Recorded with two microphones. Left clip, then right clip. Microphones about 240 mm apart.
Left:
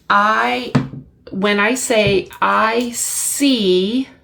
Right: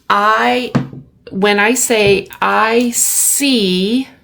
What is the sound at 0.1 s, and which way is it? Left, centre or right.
A woman's voice, right.